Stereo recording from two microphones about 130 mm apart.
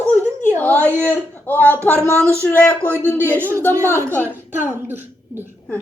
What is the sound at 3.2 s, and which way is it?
Speech, 15° right (ahead or behind).